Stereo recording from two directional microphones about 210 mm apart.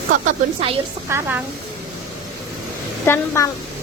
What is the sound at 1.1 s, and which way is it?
Speech, 10° right (ahead or behind).